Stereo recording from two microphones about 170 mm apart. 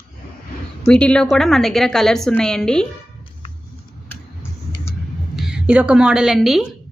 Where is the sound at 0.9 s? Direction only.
5° left (ahead or behind).